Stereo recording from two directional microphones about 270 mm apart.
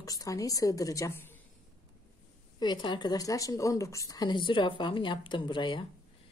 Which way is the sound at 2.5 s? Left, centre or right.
Centre.